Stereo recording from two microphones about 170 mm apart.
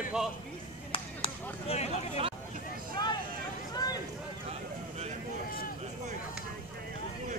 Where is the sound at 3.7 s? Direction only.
20° left (ahead or behind).